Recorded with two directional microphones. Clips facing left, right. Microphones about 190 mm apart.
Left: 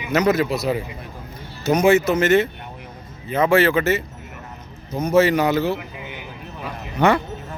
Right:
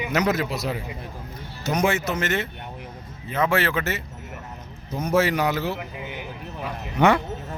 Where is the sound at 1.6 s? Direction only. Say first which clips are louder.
Left 7 dB; 5° left (ahead or behind).